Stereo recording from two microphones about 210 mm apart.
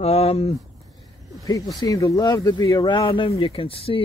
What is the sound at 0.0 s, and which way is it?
Speech, 30° left (ahead or behind).